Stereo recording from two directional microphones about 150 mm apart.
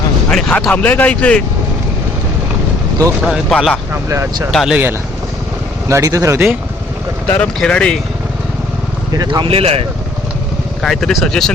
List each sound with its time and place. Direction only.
0.3 s speech: centre (ahead or behind)
3.2 s speech: centre (ahead or behind)
3.9 s speech: 20° right (ahead or behind)
4.5 s speech: centre (ahead or behind)
5.9 s speech: 20° right (ahead or behind)
7.3 s speech: 5° left (ahead or behind)
9.1 s speech: 30° right (ahead or behind)
10.8 s speech: centre (ahead or behind)